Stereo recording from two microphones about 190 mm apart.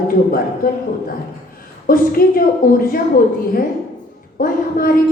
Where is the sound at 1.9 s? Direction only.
50° left (ahead or behind).